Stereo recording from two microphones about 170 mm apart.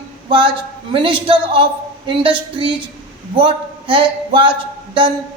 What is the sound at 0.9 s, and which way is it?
A man's voice, 30° right (ahead or behind).